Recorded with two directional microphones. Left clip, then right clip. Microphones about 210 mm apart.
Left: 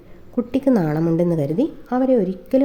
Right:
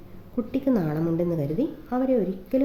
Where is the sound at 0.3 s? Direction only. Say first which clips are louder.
Left 6 dB; 40° left (ahead or behind).